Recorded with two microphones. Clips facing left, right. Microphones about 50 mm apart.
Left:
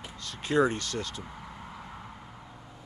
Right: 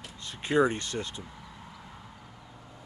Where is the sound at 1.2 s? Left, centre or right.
Left.